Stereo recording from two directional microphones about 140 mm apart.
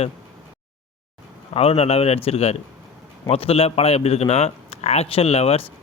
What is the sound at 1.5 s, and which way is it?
Speech, 45° left (ahead or behind).